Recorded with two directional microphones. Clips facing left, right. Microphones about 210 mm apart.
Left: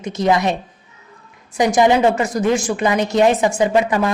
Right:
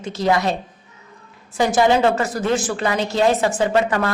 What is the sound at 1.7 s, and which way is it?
A man's voice, 15° left (ahead or behind).